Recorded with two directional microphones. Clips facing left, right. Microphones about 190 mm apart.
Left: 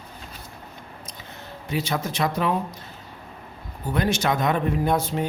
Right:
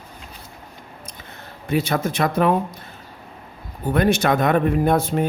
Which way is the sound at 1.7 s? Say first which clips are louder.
Right 6 dB; 55° right (ahead or behind).